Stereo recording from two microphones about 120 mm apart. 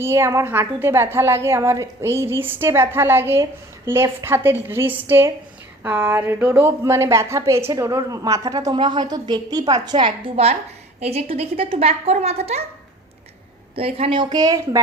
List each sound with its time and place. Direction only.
0.0 s a woman's voice: 20° right (ahead or behind); by 12.6 s 60° right (ahead or behind)
13.7 s a woman's voice: 50° right (ahead or behind); by 14.8 s 30° right (ahead or behind)